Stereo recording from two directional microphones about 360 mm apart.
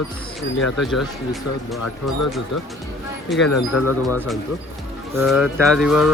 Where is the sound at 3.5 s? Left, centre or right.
Left.